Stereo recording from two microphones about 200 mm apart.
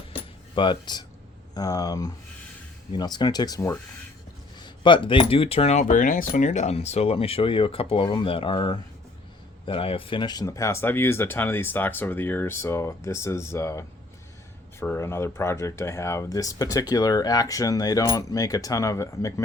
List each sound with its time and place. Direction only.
0.5 s speech: 25° left (ahead or behind)